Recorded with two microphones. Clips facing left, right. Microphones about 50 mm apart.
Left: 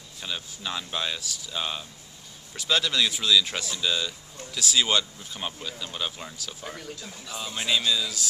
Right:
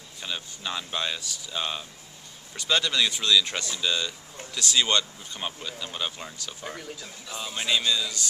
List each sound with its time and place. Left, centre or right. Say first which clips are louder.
0.2 s speech: even; centre